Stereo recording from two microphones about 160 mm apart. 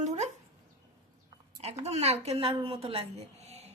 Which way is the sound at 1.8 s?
40° right (ahead or behind).